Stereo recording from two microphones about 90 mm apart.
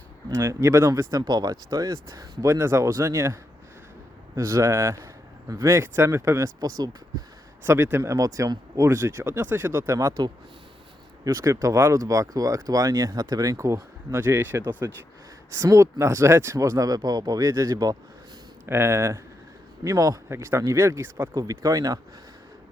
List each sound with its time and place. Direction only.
0.3 s speech: 30° right (ahead or behind)
4.4 s speech: 30° right (ahead or behind)
7.6 s speech: 25° right (ahead or behind)
11.3 s speech: 35° right (ahead or behind)
18.6 s speech: 30° right (ahead or behind)
21.3 s speech: 40° right (ahead or behind)